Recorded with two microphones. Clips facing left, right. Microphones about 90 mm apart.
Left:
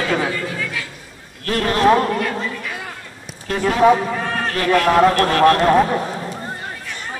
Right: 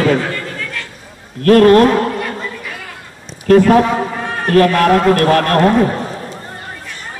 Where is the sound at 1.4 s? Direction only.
45° right (ahead or behind).